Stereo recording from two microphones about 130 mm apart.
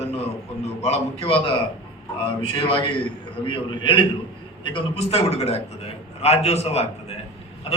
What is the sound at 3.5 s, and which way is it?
A man's voice, 40° left (ahead or behind).